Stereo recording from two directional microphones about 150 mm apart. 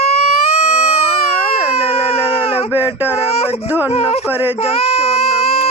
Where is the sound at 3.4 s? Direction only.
45° left (ahead or behind).